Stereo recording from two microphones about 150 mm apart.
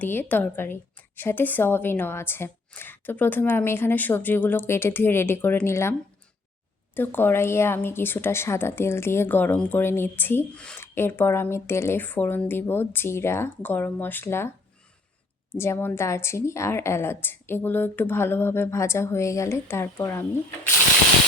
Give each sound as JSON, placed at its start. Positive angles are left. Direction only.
{"t": 0.0, "sound": "speech", "side_deg": 10}
{"t": 15.5, "sound": "speech", "side_deg": 15}